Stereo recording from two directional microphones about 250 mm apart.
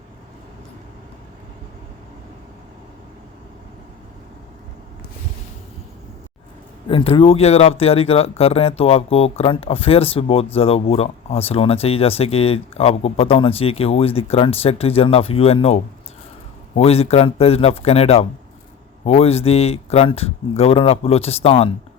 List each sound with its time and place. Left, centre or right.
6.8 s speech: left